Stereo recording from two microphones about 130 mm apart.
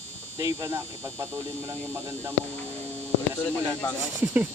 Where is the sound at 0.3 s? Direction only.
25° right (ahead or behind).